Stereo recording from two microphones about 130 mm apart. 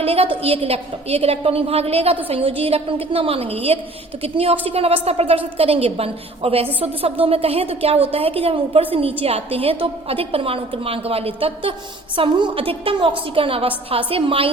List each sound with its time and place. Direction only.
0.0 s a woman's voice: 50° right (ahead or behind)